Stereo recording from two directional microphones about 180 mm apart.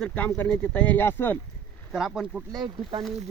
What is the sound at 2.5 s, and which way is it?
Speech, 25° right (ahead or behind).